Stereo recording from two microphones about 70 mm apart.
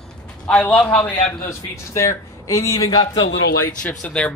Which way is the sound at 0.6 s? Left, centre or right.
Left.